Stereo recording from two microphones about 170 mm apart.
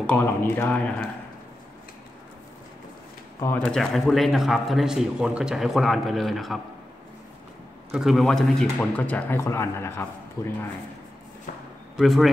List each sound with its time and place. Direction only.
0.0 s a man's voice: 10° left (ahead or behind)
3.5 s speech: 5° left (ahead or behind)
7.9 s a man's voice: centre (ahead or behind); by 10.5 s 15° left (ahead or behind)
12.0 s speech: centre (ahead or behind)